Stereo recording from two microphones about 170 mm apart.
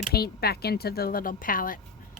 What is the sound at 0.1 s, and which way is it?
Speech, 65° left (ahead or behind).